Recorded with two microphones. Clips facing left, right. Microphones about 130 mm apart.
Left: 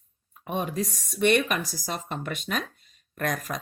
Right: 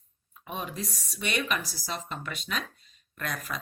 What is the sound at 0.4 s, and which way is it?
A woman's voice, 45° left (ahead or behind).